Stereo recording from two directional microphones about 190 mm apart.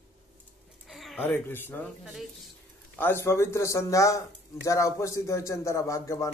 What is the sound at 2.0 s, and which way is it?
Speech, centre (ahead or behind).